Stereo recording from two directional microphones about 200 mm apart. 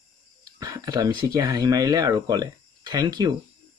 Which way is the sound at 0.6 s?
20° right (ahead or behind).